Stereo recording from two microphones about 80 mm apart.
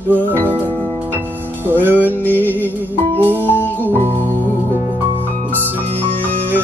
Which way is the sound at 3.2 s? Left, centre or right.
Right.